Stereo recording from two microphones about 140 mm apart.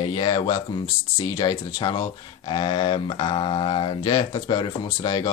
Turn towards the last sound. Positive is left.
turn(degrees=30)  # may be behind; listen again after turning